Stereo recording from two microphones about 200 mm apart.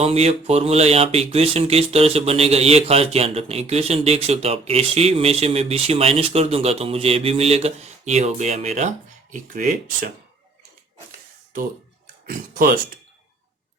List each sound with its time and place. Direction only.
0.0 s speech: 30° right (ahead or behind)
12.2 s speech: 45° right (ahead or behind)